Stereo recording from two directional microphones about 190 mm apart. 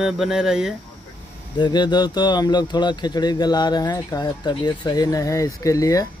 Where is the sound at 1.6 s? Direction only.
25° left (ahead or behind).